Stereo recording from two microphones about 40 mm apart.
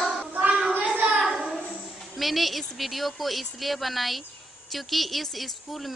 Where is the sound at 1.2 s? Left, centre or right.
Centre.